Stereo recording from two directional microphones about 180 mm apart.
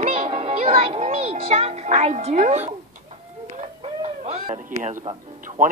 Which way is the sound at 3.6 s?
35° right (ahead or behind).